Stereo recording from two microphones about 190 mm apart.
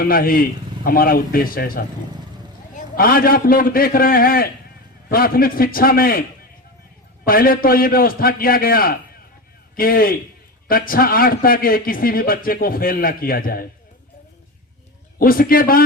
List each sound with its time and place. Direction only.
0.0 s a man's voice: 50° left (ahead or behind)
7.3 s a man's voice: 50° left (ahead or behind)
15.2 s a man's voice: 50° left (ahead or behind)